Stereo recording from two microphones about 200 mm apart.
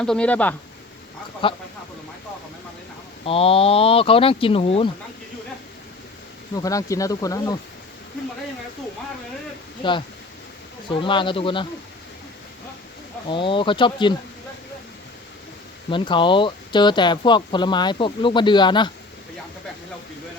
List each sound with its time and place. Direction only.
0.0 s speech: 5° left (ahead or behind)
1.4 s speech: 25° left (ahead or behind)
3.2 s speech: 30° left (ahead or behind)
6.6 s speech: 15° left (ahead or behind)
10.8 s speech: 25° left (ahead or behind)
13.2 s speech: 25° left (ahead or behind)
15.9 s speech: 25° left (ahead or behind)